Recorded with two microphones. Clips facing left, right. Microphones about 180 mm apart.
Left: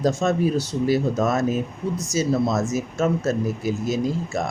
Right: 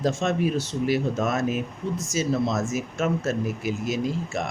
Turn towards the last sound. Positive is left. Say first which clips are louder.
# left 3 dB
turn(degrees=40)  # may be behind; listen again after turning